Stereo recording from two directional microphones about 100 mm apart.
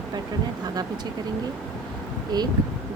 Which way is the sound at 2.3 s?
40° right (ahead or behind).